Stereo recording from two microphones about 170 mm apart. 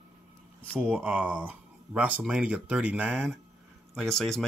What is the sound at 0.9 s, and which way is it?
Speech, 5° right (ahead or behind).